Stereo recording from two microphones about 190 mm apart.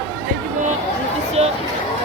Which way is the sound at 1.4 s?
35° right (ahead or behind).